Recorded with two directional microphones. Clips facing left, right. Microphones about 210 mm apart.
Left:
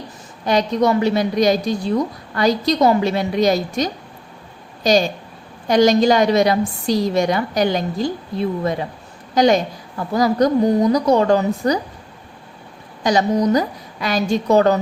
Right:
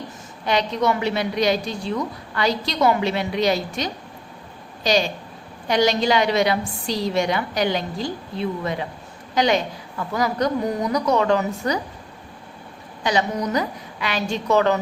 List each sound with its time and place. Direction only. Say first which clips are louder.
0.4 s a woman's voice: left 4 dB; 40° left (ahead or behind)
13.0 s a woman's voice: left 6 dB; 40° left (ahead or behind)